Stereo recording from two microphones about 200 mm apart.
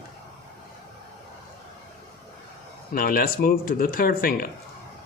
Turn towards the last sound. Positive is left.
turn(degrees=45)  # may be behind; listen again after turning